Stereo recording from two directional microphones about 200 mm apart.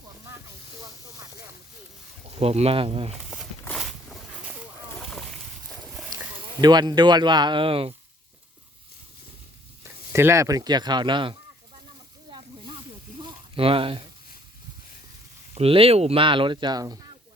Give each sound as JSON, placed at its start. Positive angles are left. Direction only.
{"t": 2.4, "sound": "speech", "side_deg": -30}
{"t": 3.6, "sound": "a sound", "side_deg": 0}
{"t": 6.1, "sound": "speech", "side_deg": -20}
{"t": 9.8, "sound": "speech", "side_deg": -10}
{"t": 13.2, "sound": "a sound", "side_deg": -25}
{"t": 15.5, "sound": "speech", "side_deg": -30}